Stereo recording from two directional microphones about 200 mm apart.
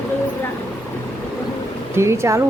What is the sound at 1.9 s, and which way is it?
Speech, 15° right (ahead or behind).